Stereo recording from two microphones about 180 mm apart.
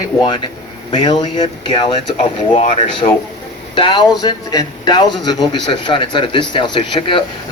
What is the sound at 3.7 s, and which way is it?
A man's voice, 25° left (ahead or behind).